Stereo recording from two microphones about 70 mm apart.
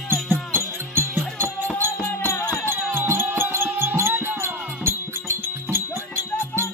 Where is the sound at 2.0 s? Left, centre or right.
Left.